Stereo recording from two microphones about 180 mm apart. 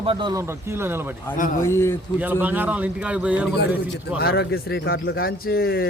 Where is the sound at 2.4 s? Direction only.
10° right (ahead or behind).